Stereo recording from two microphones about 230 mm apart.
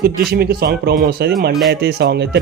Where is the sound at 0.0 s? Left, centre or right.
Right.